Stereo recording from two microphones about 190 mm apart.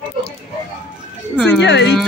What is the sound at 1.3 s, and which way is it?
Speech, 5° left (ahead or behind).